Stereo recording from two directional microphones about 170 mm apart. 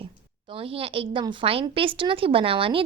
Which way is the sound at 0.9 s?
30° right (ahead or behind).